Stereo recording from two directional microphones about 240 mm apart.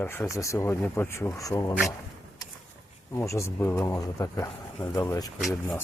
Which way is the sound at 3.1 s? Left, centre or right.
Centre.